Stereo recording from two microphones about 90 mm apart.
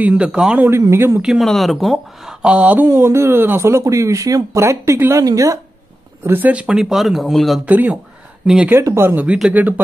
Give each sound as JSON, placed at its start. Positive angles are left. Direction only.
{"t": 0.0, "sound": "speech", "side_deg": -15}
{"t": 0.7, "sound": "speech", "side_deg": -30}
{"t": 1.4, "sound": "speech", "side_deg": 0}
{"t": 2.4, "sound": "speech", "side_deg": -15}
{"t": 6.2, "sound": "speech", "side_deg": -20}
{"t": 7.6, "sound": "speech", "side_deg": -20}
{"t": 8.6, "sound": "speech", "side_deg": -30}